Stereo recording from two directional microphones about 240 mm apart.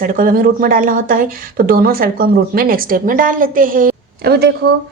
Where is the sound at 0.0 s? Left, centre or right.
Right.